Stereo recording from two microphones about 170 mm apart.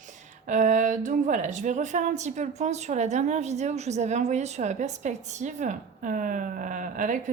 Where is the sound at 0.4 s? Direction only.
50° right (ahead or behind).